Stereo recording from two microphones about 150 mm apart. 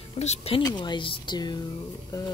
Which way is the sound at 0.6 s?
30° left (ahead or behind).